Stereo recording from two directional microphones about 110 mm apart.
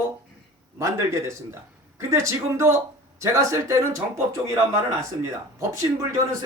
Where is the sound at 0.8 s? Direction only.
25° right (ahead or behind).